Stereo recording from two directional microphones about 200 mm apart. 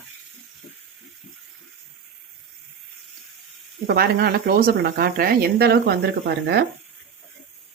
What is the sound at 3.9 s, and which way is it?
Speech, 50° right (ahead or behind).